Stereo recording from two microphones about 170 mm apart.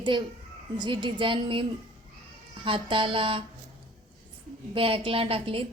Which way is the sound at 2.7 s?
30° right (ahead or behind).